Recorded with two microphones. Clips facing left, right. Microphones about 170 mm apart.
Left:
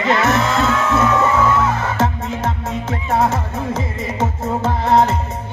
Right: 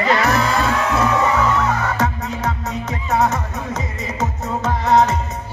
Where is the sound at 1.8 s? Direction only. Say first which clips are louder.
Left 1 dB; 25° left (ahead or behind).